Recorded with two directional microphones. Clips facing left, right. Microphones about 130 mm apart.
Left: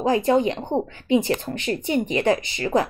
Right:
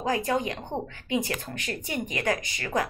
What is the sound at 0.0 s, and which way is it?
Speech, 25° left (ahead or behind).